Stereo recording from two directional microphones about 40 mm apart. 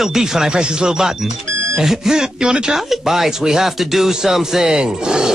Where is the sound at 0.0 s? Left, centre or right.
Centre.